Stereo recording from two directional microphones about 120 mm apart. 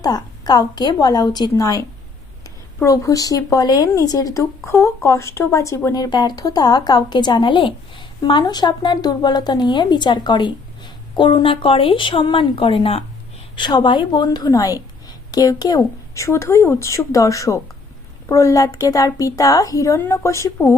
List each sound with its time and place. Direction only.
0.0 s speech: 35° left (ahead or behind); by 13.1 s 50° left (ahead or behind)
13.6 s a woman's voice: 40° left (ahead or behind); by 20.7 s 25° left (ahead or behind)